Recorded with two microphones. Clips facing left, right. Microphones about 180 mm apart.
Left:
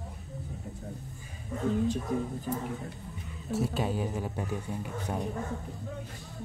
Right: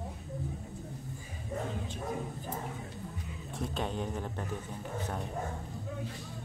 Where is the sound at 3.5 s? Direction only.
5° left (ahead or behind).